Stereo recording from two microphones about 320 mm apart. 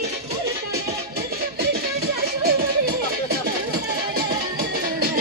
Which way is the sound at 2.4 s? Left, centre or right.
Right.